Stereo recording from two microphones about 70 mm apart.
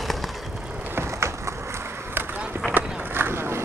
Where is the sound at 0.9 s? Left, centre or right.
Right.